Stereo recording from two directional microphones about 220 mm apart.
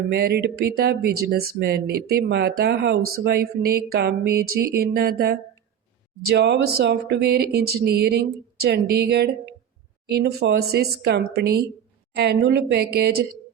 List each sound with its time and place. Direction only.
0.1 s speech: 45° right (ahead or behind)